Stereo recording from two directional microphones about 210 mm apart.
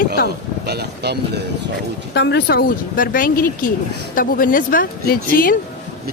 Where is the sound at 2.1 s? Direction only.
55° left (ahead or behind).